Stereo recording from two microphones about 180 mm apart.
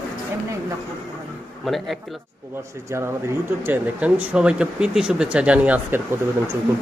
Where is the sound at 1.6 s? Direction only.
Centre (ahead or behind).